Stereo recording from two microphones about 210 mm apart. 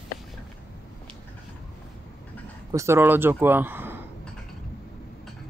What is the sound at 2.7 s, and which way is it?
Speech, 15° right (ahead or behind).